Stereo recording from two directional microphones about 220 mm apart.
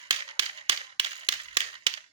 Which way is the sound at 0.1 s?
20° right (ahead or behind).